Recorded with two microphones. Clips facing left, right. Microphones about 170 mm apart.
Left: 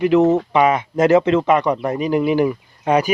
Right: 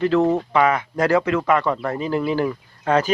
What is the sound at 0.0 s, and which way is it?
Speech, 20° left (ahead or behind).